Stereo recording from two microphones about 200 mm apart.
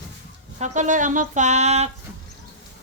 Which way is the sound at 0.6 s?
35° right (ahead or behind).